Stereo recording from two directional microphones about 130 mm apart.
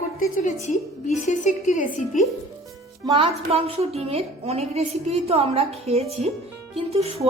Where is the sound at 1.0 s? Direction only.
70° left (ahead or behind).